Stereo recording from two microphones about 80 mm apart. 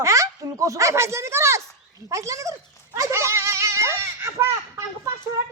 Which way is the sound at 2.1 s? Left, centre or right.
Right.